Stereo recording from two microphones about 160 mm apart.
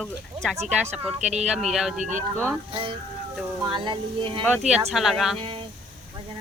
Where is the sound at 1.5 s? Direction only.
Centre (ahead or behind).